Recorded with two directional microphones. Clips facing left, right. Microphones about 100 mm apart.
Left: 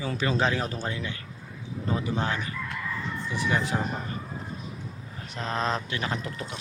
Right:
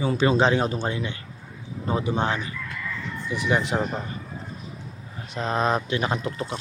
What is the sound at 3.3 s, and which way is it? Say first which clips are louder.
Speech: right 4 dB; 15° right (ahead or behind).